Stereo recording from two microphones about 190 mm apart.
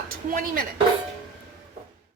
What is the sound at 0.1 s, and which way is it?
Speech, 45° right (ahead or behind).